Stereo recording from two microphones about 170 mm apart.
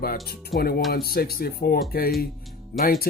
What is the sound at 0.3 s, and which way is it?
Speech, 65° left (ahead or behind).